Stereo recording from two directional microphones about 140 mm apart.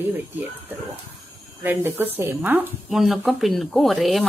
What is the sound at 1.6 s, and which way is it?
Speech, 15° right (ahead or behind).